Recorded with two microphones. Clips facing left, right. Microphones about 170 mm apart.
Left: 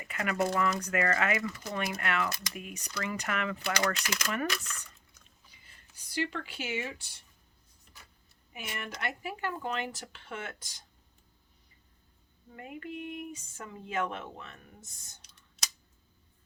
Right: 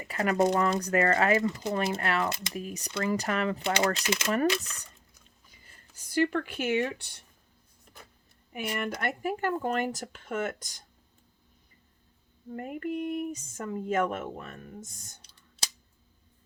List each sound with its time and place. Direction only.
0.0 s a sound: 35° right (ahead or behind)
0.5 s speech: 35° right (ahead or behind)
5.5 s speech: 45° right (ahead or behind)
8.5 s speech: 55° right (ahead or behind)
12.5 s speech: 45° right (ahead or behind)
15.2 s clicking: 30° right (ahead or behind)